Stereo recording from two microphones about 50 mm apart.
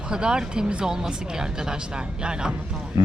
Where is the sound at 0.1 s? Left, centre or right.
Centre.